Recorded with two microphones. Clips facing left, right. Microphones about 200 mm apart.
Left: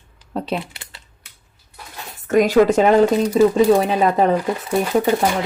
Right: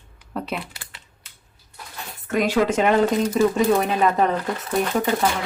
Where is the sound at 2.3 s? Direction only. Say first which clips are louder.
Left 7 dB; 40° left (ahead or behind).